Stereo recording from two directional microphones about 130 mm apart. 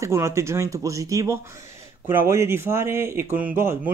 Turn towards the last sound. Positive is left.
turn(degrees=-15)  # may be behind; listen again after turning